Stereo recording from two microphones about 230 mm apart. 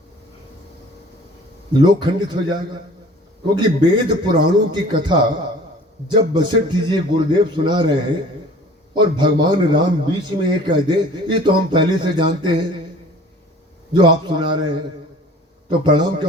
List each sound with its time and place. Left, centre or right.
1.7 s a man's voice: centre
9.0 s a man's voice: centre
13.9 s a man's voice: centre
15.8 s a man's voice: centre